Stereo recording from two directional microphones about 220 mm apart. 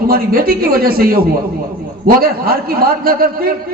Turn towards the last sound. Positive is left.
turn(degrees=-45)  # may be behind; listen again after turning